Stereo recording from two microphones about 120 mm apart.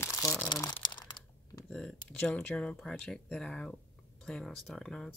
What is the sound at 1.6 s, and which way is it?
Speech, 5° left (ahead or behind).